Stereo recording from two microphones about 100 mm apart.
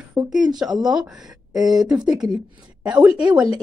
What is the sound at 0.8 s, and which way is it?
Speech, 5° right (ahead or behind).